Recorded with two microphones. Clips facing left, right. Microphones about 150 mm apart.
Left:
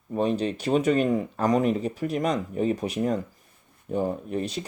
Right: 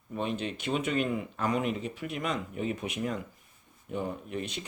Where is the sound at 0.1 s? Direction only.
40° left (ahead or behind).